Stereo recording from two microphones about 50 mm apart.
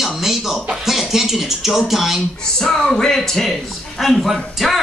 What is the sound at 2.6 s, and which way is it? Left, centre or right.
A man's voice, centre.